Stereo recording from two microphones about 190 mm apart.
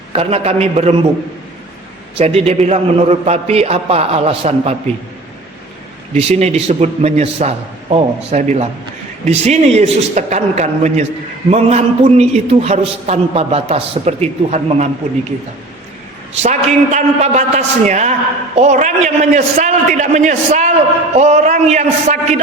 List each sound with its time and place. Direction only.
0.1 s a man's voice: 30° right (ahead or behind)
2.1 s a man's voice: 30° right (ahead or behind)
6.1 s a man's voice: 35° right (ahead or behind)
16.4 s a man's voice: 35° right (ahead or behind)